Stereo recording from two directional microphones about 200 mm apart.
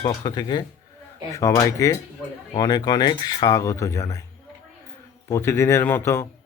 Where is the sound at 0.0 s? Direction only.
20° left (ahead or behind).